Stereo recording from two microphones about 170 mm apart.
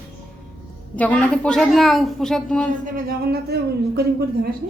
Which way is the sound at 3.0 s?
65° right (ahead or behind).